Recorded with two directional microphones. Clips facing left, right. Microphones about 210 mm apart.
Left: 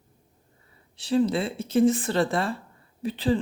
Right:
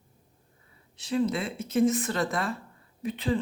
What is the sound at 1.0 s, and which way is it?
A woman's voice, 35° left (ahead or behind).